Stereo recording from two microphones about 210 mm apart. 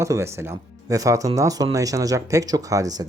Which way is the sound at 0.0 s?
15° right (ahead or behind).